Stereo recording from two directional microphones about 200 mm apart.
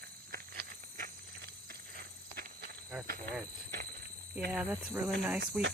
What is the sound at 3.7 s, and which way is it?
Horse, 50° right (ahead or behind).